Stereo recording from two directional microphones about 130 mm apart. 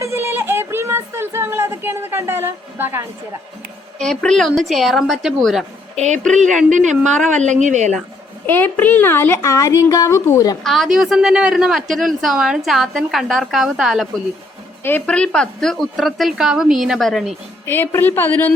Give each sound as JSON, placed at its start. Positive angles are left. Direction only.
{"t": 0.0, "sound": "a sound", "side_deg": -20}
{"t": 4.0, "sound": "speech", "side_deg": 5}
{"t": 6.3, "sound": "a woman's voice", "side_deg": -70}
{"t": 8.4, "sound": "speech", "side_deg": 15}
{"t": 10.6, "sound": "speech", "side_deg": 0}
{"t": 14.8, "sound": "speech", "side_deg": 10}
{"t": 17.7, "sound": "a woman's voice", "side_deg": 15}